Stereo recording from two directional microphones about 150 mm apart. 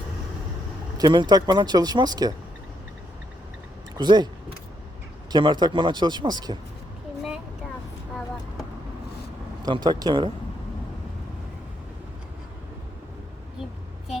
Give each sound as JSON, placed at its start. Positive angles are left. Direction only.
{"t": 0.9, "sound": "speech", "side_deg": -30}
{"t": 3.9, "sound": "a sound", "side_deg": -30}
{"t": 5.3, "sound": "speech", "side_deg": -30}
{"t": 9.6, "sound": "speech", "side_deg": -30}